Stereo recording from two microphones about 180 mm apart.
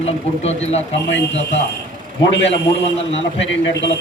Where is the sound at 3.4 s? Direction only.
80° left.